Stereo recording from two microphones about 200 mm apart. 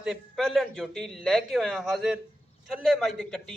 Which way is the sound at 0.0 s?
Centre (ahead or behind).